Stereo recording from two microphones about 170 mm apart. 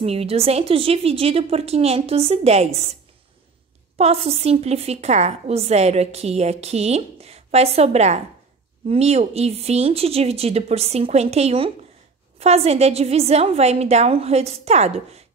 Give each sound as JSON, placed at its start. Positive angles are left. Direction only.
{"t": 0.0, "sound": "a woman's voice", "side_deg": -35}
{"t": 4.0, "sound": "a woman's voice", "side_deg": -35}